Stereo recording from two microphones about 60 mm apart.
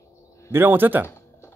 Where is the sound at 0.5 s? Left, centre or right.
Right.